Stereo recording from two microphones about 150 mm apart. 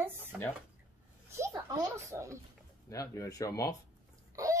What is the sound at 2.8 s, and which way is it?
Speech, 20° left (ahead or behind).